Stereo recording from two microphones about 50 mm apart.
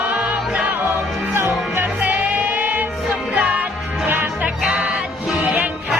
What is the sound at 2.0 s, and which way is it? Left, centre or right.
Music, right.